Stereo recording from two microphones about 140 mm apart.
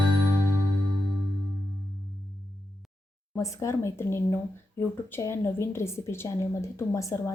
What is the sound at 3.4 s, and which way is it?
A woman's voice, 25° left (ahead or behind).